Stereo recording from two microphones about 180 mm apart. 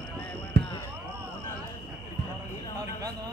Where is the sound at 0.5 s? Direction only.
65° right (ahead or behind).